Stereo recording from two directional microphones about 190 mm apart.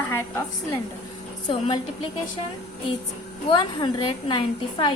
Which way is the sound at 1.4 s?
25° left (ahead or behind).